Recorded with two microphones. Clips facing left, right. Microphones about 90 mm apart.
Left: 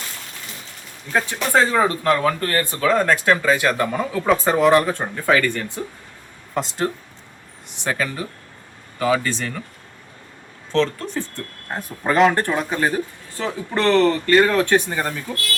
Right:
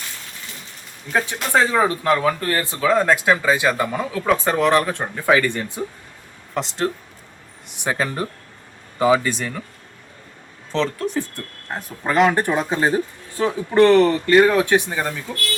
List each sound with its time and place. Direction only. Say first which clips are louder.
1.1 s speech: left 1 dB; 5° right (ahead or behind)
5.2 s speech: right 1 dB; 10° right (ahead or behind)
6.5 s speech: even; centre (ahead or behind)
9.0 s speech: right 3 dB; 15° right (ahead or behind)
10.7 s speech: left 1 dB; 5° right (ahead or behind)
12.4 s speech: right 1 dB; 15° right (ahead or behind)